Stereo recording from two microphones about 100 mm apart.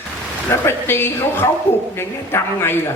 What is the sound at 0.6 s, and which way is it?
A woman's voice, 25° left (ahead or behind).